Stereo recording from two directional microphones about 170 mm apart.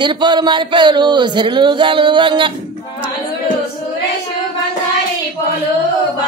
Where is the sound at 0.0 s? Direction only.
25° right (ahead or behind).